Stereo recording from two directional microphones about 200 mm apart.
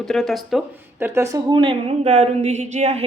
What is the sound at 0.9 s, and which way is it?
A woman's voice, 10° right (ahead or behind).